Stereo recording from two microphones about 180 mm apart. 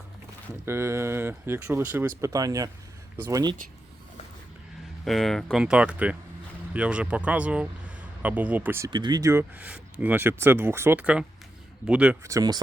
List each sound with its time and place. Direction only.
0.6 s speech: 15° right (ahead or behind)
5.0 s speech: centre (ahead or behind)
8.9 s speech: 25° right (ahead or behind); by 12.1 s 5° right (ahead or behind)
12.2 s speech: 20° right (ahead or behind)